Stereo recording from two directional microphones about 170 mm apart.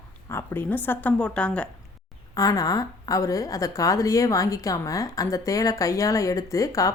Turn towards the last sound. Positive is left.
turn(degrees=20)  # may be behind; listen again after turning